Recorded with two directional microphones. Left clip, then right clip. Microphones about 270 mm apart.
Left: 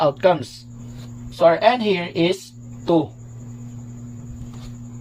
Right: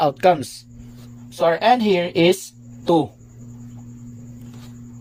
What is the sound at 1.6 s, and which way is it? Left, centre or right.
Speech, right.